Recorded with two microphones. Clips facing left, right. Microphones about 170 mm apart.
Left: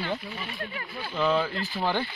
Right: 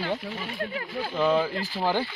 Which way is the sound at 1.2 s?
10° right (ahead or behind).